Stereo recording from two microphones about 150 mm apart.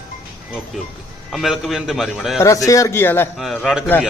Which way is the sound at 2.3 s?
20° left (ahead or behind).